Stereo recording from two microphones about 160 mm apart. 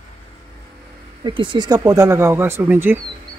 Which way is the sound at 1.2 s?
30° right (ahead or behind).